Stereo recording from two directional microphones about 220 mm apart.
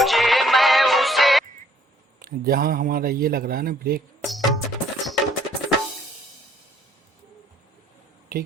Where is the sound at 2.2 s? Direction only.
40° right (ahead or behind).